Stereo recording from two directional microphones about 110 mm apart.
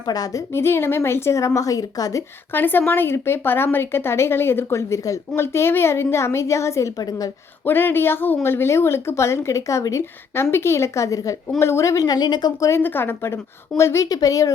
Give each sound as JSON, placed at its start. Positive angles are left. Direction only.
{"t": 0.0, "sound": "a woman's voice", "side_deg": 35}
{"t": 2.5, "sound": "a woman's voice", "side_deg": 20}
{"t": 7.6, "sound": "a woman's voice", "side_deg": 20}
{"t": 12.6, "sound": "a woman's voice", "side_deg": 20}